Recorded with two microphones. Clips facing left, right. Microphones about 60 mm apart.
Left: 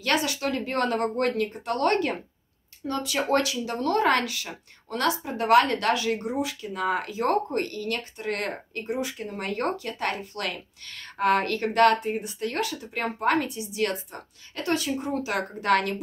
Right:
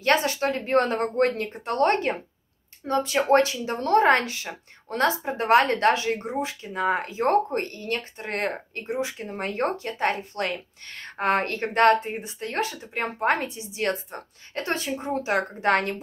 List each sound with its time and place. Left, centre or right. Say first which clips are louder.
0.0 s speech: right 4 dB; right